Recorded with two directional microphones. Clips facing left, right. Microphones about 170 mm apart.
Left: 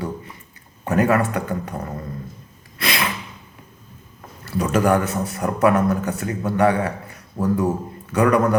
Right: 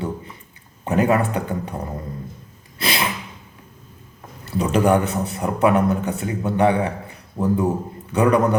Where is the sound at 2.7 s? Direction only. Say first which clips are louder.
Right 1 dB; 30° right (ahead or behind).